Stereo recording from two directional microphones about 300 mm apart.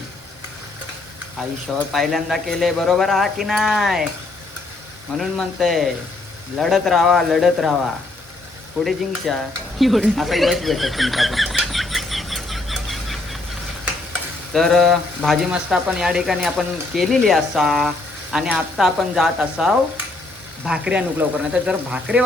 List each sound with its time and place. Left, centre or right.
1.9 s speech: centre
5.1 s speech: centre
8.8 s speech: centre
9.7 s a sound: centre
14.5 s speech: centre